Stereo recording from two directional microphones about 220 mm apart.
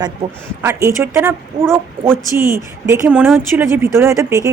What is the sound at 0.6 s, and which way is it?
A woman's voice, 10° right (ahead or behind).